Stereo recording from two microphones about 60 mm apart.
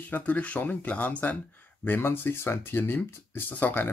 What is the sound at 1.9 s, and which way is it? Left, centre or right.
Speech, left.